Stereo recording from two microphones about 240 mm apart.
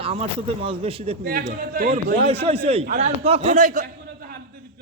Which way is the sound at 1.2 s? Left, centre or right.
Right.